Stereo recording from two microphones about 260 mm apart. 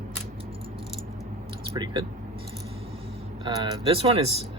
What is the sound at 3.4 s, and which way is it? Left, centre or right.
Speech, centre.